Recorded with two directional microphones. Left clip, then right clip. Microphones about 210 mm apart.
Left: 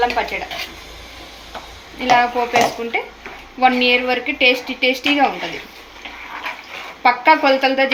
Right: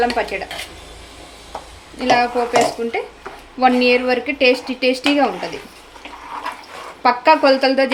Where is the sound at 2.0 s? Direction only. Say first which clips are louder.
Left 1 dB; 25° right (ahead or behind).